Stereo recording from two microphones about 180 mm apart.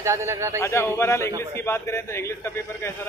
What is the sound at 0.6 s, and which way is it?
A man's voice, 15° left (ahead or behind).